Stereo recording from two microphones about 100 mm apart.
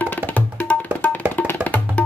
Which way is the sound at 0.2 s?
20° right (ahead or behind).